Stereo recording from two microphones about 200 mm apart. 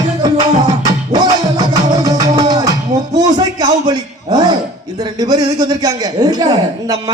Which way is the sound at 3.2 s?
20° right (ahead or behind).